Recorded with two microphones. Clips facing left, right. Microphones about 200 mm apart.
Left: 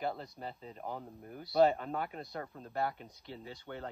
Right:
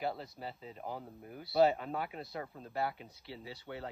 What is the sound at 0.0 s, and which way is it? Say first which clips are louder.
Speech: even; 5° right (ahead or behind).